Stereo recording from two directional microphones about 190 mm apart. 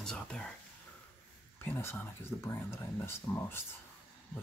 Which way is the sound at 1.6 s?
10° left (ahead or behind).